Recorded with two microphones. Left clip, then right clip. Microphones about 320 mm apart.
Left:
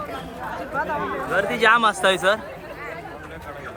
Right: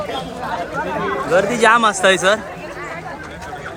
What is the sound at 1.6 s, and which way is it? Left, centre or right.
Speech, centre.